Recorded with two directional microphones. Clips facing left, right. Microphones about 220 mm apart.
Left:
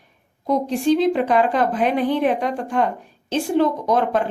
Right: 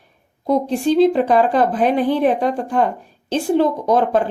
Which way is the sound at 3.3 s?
30° right (ahead or behind).